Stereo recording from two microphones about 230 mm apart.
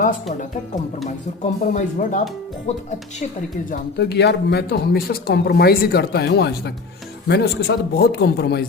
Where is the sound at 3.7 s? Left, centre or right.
Left.